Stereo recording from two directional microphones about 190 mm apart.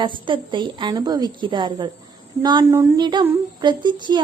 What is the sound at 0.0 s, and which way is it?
A woman's voice, 25° right (ahead or behind).